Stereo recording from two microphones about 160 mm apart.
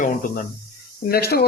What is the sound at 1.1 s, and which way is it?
Speech, 75° left (ahead or behind).